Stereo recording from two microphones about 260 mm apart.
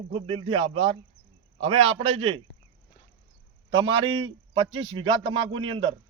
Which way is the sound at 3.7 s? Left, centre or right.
Centre.